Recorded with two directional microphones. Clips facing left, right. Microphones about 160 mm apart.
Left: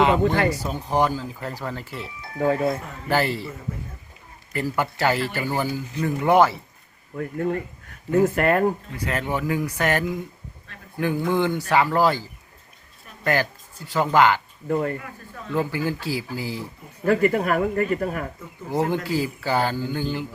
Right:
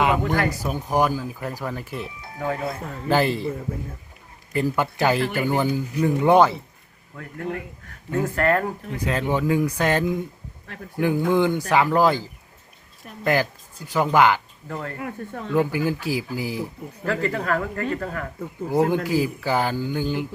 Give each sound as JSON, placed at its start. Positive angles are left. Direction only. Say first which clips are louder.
{"t": 0.1, "sound": "speech", "louder": "left 2 dB", "side_deg": 20}
{"t": 0.6, "sound": "speech", "louder": "right 1 dB", "side_deg": -10}
{"t": 2.4, "sound": "speech", "louder": "left 6 dB", "side_deg": 20}
{"t": 3.1, "sound": "speech", "louder": "right 2 dB", "side_deg": -20}
{"t": 4.5, "sound": "speech", "louder": "right 2 dB", "side_deg": -15}
{"t": 8.2, "sound": "speech", "louder": "left 1 dB", "side_deg": 20}
{"t": 9.0, "sound": "speech", "louder": "right 3 dB", "side_deg": -15}
{"t": 14.7, "sound": "speech", "louder": "left 8 dB", "side_deg": 20}
{"t": 14.9, "sound": "speech", "louder": "right 5 dB", "side_deg": -55}
{"t": 15.5, "sound": "speech", "louder": "right 3 dB", "side_deg": -15}
{"t": 17.1, "sound": "speech", "louder": "left 4 dB", "side_deg": 20}
{"t": 18.7, "sound": "speech", "louder": "right 3 dB", "side_deg": -15}